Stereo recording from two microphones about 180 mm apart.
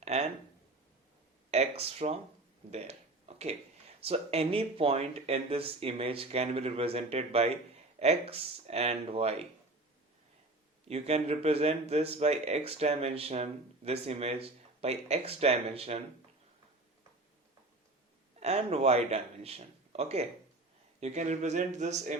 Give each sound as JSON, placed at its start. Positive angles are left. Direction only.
{"t": 0.0, "sound": "a sound", "side_deg": -35}
{"t": 1.5, "sound": "speech", "side_deg": -35}
{"t": 2.6, "sound": "a sound", "side_deg": -35}
{"t": 4.0, "sound": "speech", "side_deg": -35}
{"t": 10.8, "sound": "speech", "side_deg": -35}
{"t": 18.3, "sound": "speech", "side_deg": -35}